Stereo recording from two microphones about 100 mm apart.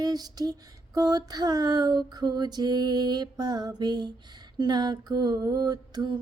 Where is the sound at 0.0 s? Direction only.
40° right (ahead or behind).